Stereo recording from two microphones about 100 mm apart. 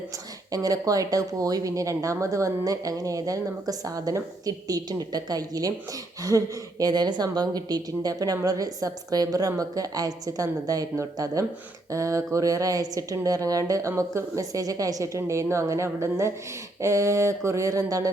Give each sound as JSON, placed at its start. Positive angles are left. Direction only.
{"t": 0.5, "sound": "speech", "side_deg": -35}